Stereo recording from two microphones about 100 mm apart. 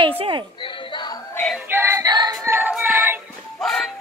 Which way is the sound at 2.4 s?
20° right (ahead or behind).